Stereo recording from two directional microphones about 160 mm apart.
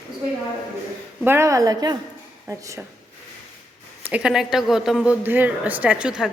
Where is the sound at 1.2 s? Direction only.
15° right (ahead or behind).